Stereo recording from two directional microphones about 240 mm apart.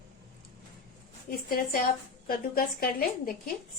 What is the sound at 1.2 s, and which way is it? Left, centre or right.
A woman's voice, left.